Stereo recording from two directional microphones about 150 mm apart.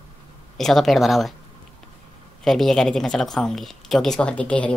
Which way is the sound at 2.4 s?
Centre (ahead or behind).